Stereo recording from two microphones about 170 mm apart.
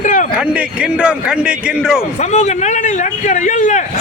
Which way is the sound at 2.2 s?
45° left (ahead or behind).